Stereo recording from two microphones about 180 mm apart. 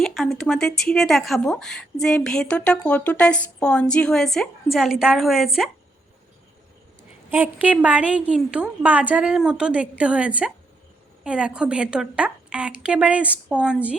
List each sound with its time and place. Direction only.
0.0 s a woman's voice: centre (ahead or behind)
7.3 s a woman's voice: 10° right (ahead or behind)